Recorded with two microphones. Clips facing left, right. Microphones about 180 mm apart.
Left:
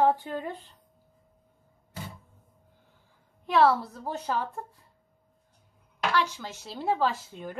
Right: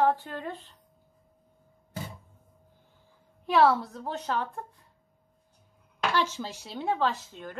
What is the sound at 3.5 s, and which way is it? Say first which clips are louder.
A woman's voice: even; centre (ahead or behind).